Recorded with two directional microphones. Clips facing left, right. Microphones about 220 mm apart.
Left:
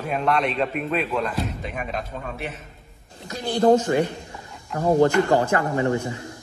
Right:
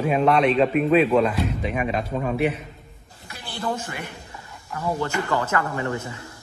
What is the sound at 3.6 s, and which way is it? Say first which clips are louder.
Speech: left 12 dB; 40° left (ahead or behind).